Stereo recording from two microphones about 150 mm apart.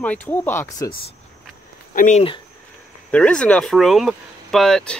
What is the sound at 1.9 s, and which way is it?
Speech, 55° left (ahead or behind).